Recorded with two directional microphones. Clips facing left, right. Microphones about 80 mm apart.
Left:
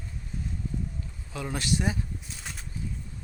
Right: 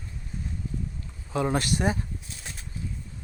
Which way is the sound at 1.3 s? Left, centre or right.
Right.